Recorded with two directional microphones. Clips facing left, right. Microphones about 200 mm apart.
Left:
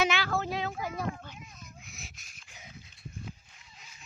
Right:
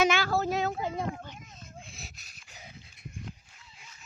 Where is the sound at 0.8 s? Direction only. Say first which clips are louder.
Right 2 dB; 25° right (ahead or behind).